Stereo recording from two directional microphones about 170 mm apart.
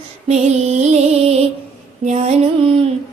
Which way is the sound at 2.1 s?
40° right (ahead or behind).